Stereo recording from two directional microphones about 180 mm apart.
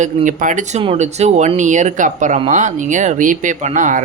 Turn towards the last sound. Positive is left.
turn(degrees=-45)  # may be behind; listen again after turning